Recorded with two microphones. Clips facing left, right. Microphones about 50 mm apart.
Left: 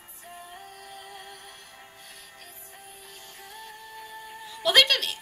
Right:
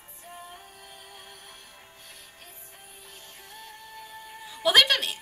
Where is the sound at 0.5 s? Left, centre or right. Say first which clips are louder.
Left 4 dB; centre.